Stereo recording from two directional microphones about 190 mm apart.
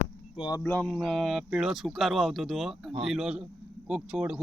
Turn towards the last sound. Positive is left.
turn(degrees=-5)  # may be behind; listen again after turning